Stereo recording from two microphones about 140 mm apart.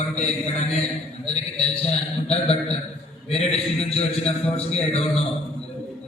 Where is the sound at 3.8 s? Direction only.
45° left (ahead or behind).